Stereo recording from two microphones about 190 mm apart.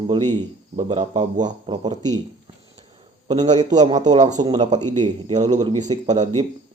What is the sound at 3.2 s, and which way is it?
Speech, 35° right (ahead or behind).